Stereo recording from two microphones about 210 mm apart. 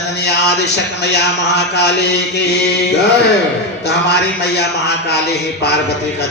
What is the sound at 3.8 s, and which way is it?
Speech, 50° left (ahead or behind).